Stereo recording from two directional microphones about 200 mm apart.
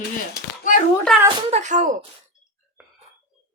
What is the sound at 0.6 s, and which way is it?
Speech, 40° left (ahead or behind).